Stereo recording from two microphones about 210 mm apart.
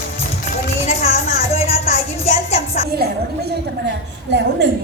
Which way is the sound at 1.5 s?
30° left (ahead or behind).